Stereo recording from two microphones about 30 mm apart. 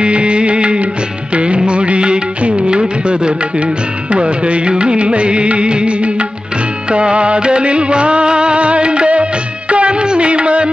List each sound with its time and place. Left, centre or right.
0.0 s music: right